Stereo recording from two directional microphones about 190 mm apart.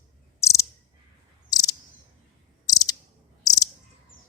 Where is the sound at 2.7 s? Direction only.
20° left (ahead or behind).